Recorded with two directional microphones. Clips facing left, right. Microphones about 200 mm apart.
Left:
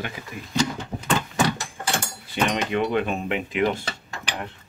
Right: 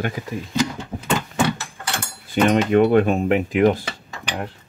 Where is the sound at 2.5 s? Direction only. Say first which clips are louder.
Right 10 dB; 50° right (ahead or behind).